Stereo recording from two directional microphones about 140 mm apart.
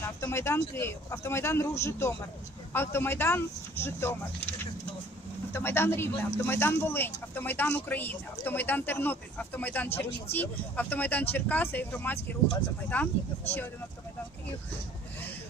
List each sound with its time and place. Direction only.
0.0 s speech: 20° left (ahead or behind)
5.5 s speech: 15° left (ahead or behind)